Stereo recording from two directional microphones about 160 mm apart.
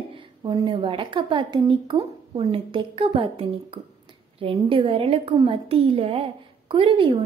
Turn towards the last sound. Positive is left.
turn(degrees=-30)  # may be behind; listen again after turning